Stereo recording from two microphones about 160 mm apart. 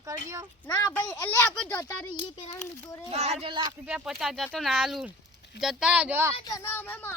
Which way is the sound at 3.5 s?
30° right (ahead or behind).